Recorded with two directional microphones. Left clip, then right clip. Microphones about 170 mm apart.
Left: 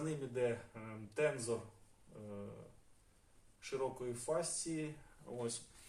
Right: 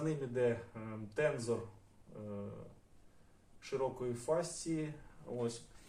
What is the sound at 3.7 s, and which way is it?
Speech, 15° left (ahead or behind).